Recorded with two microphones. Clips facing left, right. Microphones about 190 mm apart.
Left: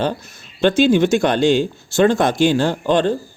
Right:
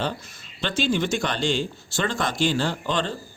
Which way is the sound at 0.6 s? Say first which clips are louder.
Left 11 dB; 60° left (ahead or behind).